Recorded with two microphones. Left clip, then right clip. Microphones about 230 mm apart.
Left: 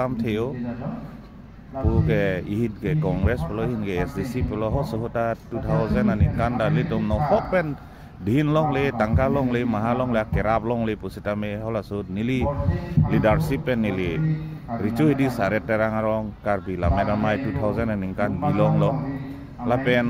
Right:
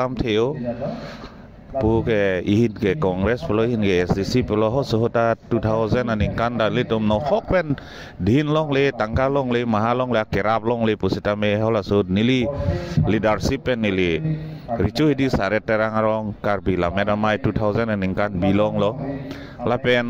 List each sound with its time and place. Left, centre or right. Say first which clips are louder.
0.0 s speech: right 5 dB; right
1.9 s speech: right 4 dB; right